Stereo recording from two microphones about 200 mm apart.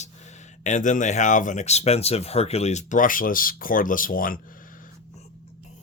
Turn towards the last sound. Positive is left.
turn(degrees=45)  # may be behind; listen again after turning